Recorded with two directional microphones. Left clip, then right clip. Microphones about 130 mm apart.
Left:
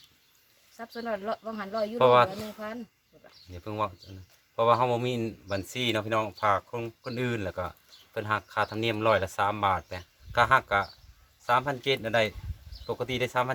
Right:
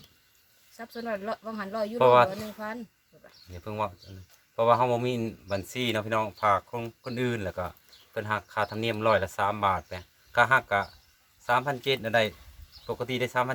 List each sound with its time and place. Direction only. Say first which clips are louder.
0.8 s speech: even; 30° right (ahead or behind)
2.0 s speech: right 1 dB; 10° left (ahead or behind)
3.5 s speech: even; 10° left (ahead or behind)